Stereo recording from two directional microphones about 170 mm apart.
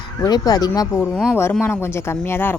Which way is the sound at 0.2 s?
25° left (ahead or behind).